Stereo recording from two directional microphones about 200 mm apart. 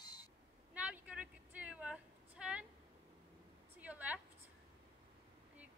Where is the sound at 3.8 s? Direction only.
5° right (ahead or behind).